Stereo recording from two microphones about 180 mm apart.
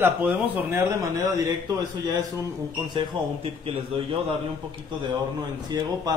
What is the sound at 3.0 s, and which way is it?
A man's voice, 30° right (ahead or behind).